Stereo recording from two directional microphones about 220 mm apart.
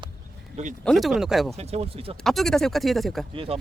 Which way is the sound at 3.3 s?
25° right (ahead or behind).